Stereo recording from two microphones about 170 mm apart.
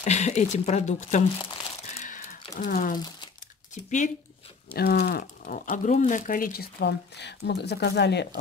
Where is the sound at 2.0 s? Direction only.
50° left (ahead or behind).